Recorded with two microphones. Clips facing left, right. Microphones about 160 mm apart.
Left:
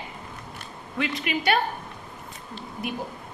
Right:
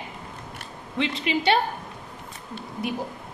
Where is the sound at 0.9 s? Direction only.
25° right (ahead or behind).